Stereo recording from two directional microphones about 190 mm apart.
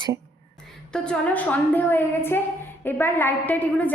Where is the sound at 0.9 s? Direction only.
5° left (ahead or behind).